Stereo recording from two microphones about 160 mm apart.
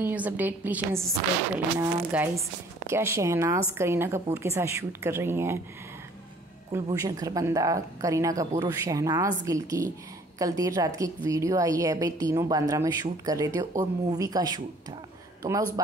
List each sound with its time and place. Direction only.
0.0 s a woman's voice: 10° right (ahead or behind)
6.7 s a woman's voice: 20° right (ahead or behind)